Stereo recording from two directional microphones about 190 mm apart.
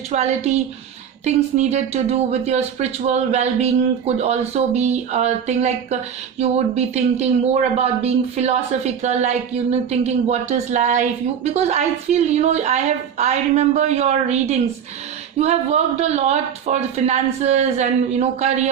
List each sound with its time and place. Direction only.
0.1 s speech: 35° right (ahead or behind)